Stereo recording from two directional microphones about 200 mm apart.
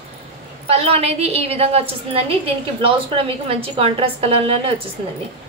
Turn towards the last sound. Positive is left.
turn(degrees=-30)  # may be behind; listen again after turning